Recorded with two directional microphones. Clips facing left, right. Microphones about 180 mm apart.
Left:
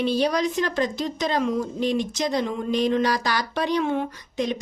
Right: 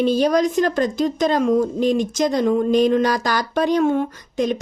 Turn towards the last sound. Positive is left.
turn(degrees=-45)  # may be behind; listen again after turning